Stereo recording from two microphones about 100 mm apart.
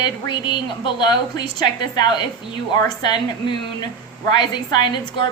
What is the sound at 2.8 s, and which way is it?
A woman's voice, 45° left (ahead or behind).